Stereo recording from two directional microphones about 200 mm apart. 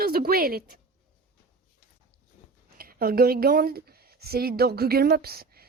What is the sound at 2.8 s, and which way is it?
Speech, 45° right (ahead or behind).